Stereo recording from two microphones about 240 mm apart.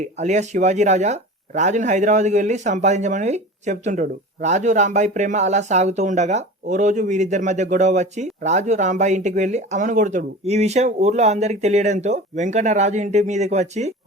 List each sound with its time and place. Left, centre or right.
0.2 s speech: right